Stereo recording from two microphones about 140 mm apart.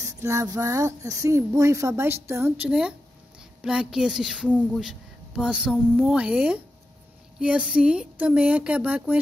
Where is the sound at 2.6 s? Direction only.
5° right (ahead or behind).